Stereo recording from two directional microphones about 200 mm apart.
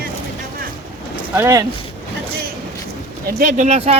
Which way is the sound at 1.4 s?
15° right (ahead or behind).